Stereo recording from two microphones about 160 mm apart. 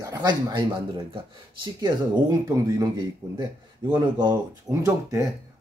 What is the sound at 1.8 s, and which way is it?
Speech, 25° right (ahead or behind).